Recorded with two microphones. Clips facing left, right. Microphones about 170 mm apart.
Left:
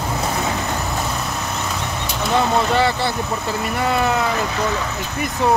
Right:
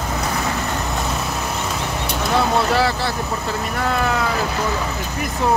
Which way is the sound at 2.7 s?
Centre (ahead or behind).